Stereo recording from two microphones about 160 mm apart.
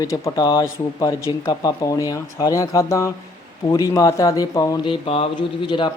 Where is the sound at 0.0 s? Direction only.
25° left (ahead or behind).